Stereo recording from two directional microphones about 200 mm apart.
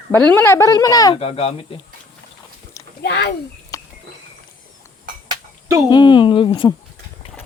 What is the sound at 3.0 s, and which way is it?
Speech, 60° left (ahead or behind).